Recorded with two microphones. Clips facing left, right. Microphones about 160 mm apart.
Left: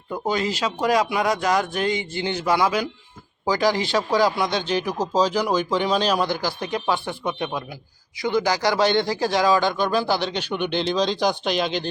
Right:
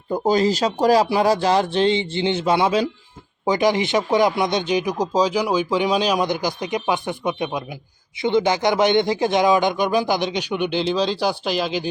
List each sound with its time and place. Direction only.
0.1 s speech: 35° right (ahead or behind); by 11.9 s 5° right (ahead or behind)